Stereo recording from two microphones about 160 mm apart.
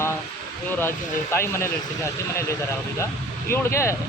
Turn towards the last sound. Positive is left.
turn(degrees=15)  # may be behind; listen again after turning